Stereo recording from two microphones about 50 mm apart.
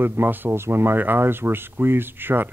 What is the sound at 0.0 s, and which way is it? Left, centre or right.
Speech, right.